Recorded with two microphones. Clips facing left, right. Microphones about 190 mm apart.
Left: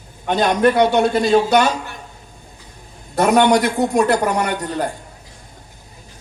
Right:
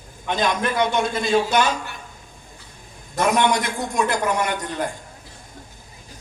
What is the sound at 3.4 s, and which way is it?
Speech, 35° left (ahead or behind).